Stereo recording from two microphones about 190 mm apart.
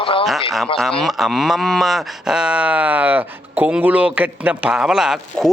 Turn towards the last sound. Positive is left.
turn(degrees=0)  # may be behind; listen again after turning